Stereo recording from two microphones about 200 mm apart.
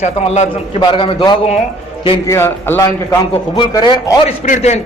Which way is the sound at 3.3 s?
25° left (ahead or behind).